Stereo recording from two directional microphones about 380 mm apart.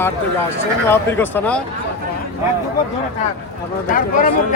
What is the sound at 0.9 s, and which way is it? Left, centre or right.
Speech, centre.